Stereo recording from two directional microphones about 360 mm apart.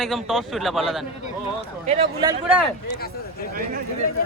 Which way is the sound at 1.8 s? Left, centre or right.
Centre.